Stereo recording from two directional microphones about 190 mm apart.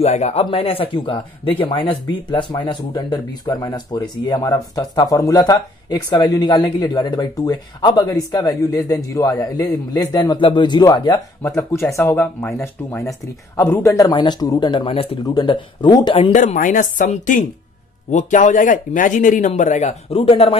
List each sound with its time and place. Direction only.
0.0 s speech: 35° left (ahead or behind)
11.4 s speech: 10° left (ahead or behind)
13.6 s speech: 15° left (ahead or behind)
16.3 s speech: 45° left (ahead or behind)